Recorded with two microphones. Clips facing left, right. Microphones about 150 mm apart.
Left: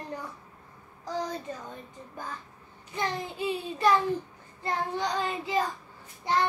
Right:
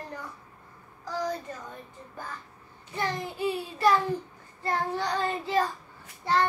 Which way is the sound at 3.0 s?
20° left (ahead or behind).